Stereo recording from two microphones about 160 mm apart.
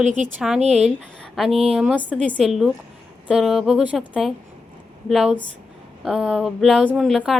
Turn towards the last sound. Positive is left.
turn(degrees=0)  # may be behind; listen again after turning